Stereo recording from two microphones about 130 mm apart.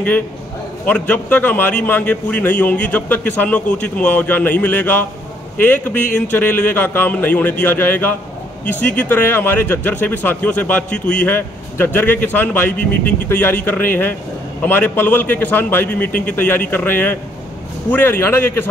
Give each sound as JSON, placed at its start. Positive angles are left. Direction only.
{"t": 0.8, "sound": "speech", "side_deg": 10}